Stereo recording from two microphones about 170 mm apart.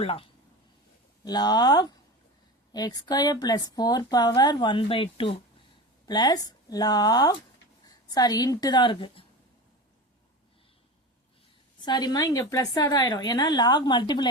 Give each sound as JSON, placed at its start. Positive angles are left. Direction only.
{"t": 0.0, "sound": "a woman's voice", "side_deg": 35}
{"t": 11.9, "sound": "a woman's voice", "side_deg": 25}